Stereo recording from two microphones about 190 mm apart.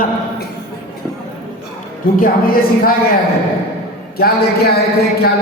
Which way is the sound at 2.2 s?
50° left (ahead or behind).